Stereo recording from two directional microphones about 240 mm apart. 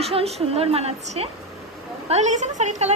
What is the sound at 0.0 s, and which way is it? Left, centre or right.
A woman's voice, right.